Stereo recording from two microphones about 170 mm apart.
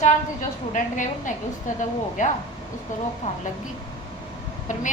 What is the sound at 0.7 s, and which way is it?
A woman's voice, 50° left (ahead or behind).